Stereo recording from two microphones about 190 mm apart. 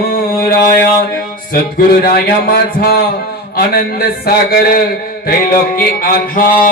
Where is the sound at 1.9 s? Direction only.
55° left (ahead or behind).